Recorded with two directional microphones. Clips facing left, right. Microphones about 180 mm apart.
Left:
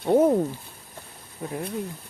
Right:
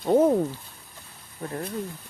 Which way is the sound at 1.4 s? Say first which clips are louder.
Left 1 dB; 5° left (ahead or behind).